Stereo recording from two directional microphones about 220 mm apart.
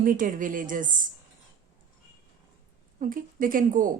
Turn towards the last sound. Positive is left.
turn(degrees=-40)  # may be behind; listen again after turning